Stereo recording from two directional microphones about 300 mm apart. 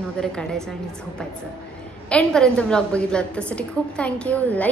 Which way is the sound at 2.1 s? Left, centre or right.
Centre.